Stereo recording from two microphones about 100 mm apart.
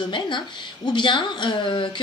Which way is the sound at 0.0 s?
50° left (ahead or behind).